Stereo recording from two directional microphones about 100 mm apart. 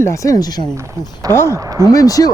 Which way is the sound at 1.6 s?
35° right (ahead or behind).